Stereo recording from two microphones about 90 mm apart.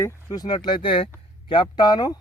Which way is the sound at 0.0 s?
45° left (ahead or behind).